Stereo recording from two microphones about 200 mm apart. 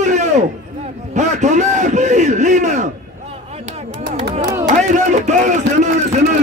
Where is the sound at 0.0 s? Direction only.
35° right (ahead or behind).